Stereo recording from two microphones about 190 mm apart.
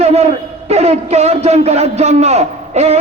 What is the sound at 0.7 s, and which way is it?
A man's voice, 35° right (ahead or behind).